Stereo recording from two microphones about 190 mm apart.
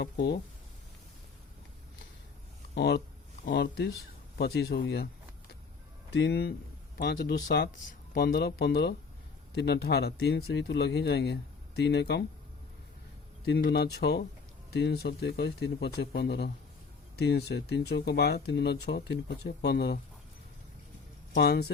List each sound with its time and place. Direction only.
0.0 s speech: 65° left (ahead or behind)
2.7 s speech: 60° left (ahead or behind)
4.4 s speech: 60° left (ahead or behind)
6.1 s speech: 60° left (ahead or behind)
7.8 s speech: 55° left (ahead or behind)
13.4 s speech: 60° left (ahead or behind)
21.3 s speech: 60° left (ahead or behind)